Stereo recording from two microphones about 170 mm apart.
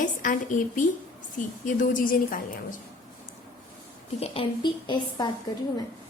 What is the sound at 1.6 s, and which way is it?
Speech, 50° left (ahead or behind).